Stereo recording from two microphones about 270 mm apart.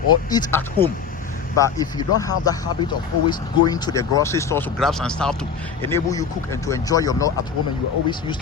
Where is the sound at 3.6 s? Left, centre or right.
Centre.